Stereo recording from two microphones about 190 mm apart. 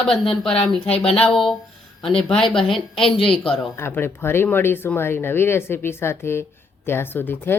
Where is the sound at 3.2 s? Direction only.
30° left (ahead or behind).